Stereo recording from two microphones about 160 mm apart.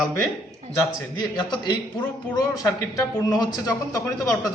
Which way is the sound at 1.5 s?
30° left (ahead or behind).